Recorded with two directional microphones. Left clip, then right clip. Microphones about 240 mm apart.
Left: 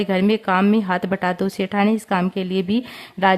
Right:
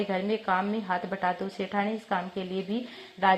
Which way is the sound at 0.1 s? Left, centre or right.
Left.